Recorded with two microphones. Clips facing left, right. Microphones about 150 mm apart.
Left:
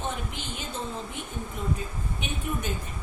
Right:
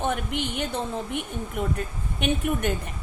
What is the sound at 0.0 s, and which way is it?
A woman's voice, 65° right (ahead or behind).